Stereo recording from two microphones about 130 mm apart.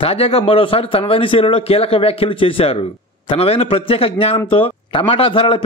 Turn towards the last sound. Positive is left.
turn(degrees=45)  # may be behind; listen again after turning